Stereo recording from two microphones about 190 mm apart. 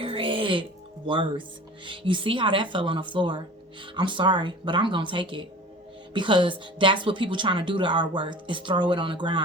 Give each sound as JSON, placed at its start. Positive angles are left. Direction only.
{"t": 0.0, "sound": "music", "side_deg": -30}
{"t": 1.0, "sound": "speech", "side_deg": -25}